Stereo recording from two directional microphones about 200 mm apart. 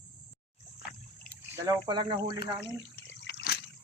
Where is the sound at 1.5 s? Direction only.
15° right (ahead or behind).